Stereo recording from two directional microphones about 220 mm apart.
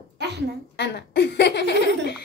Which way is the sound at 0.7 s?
50° left (ahead or behind).